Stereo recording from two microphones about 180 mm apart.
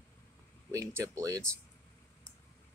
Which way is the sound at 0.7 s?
15° right (ahead or behind).